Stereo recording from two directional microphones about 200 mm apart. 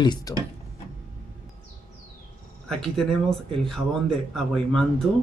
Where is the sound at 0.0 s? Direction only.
20° left (ahead or behind).